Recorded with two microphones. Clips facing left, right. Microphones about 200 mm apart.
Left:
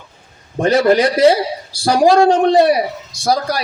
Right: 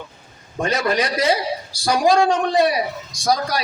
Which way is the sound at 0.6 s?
30° left (ahead or behind).